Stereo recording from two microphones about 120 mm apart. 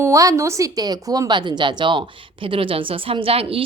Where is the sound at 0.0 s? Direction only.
25° right (ahead or behind).